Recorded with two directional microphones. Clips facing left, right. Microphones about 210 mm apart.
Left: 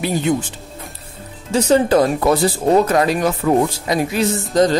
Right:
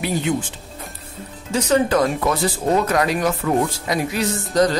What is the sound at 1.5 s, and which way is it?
Speech, 30° left (ahead or behind).